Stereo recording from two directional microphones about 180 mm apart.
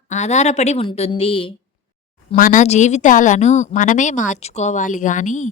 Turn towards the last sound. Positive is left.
turn(degrees=45)  # may be behind; listen again after turning